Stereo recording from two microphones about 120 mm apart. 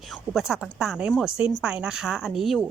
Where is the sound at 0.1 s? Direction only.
5° right (ahead or behind).